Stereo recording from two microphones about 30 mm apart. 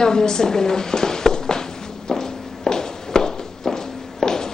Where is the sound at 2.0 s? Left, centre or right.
Left.